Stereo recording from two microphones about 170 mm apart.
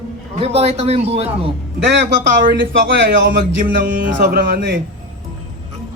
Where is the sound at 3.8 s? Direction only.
55° right (ahead or behind).